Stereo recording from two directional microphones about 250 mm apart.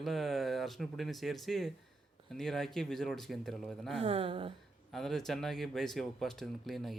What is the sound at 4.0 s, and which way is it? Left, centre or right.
Speech, right.